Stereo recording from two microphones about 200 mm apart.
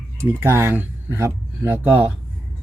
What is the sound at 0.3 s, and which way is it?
Speech, 10° right (ahead or behind).